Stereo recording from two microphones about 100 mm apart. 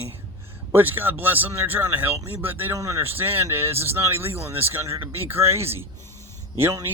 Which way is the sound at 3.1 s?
20° right (ahead or behind).